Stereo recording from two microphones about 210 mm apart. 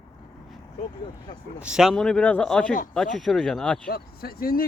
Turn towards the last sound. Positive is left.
turn(degrees=45)  # may be behind; listen again after turning